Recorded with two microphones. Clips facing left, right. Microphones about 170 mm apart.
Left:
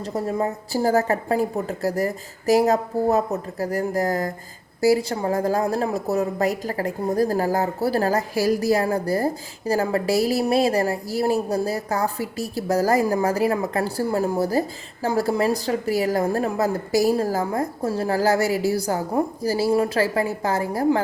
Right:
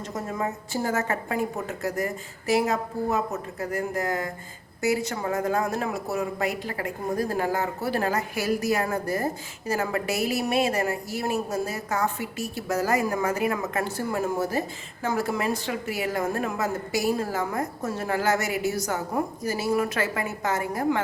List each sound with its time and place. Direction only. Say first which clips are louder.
0.0 s a woman's voice: left 6 dB; 35° left (ahead or behind)